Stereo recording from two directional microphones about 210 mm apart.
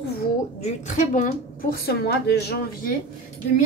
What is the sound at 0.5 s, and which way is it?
A woman's voice, 35° left (ahead or behind).